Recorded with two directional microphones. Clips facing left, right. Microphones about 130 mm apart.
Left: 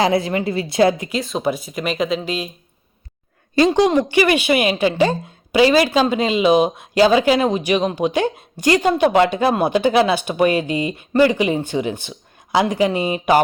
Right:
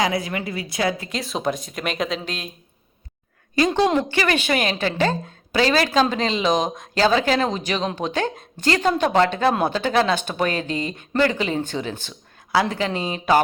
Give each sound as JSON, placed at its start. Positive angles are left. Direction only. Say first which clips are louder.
{"t": 0.0, "sound": "a woman's voice", "louder": "left 6 dB", "side_deg": 30}
{"t": 1.1, "sound": "speech", "louder": "left 4 dB", "side_deg": 0}
{"t": 3.7, "sound": "a woman's voice", "louder": "left 4 dB", "side_deg": 10}